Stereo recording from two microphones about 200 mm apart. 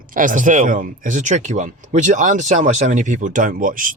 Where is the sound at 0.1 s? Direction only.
40° right (ahead or behind).